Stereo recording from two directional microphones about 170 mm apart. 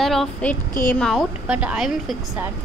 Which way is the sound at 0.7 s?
55° left (ahead or behind).